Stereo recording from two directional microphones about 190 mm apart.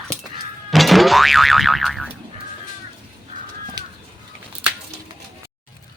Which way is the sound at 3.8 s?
20° right (ahead or behind).